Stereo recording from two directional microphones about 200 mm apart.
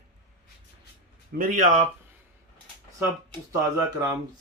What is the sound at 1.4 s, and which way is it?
Speech, 40° right (ahead or behind).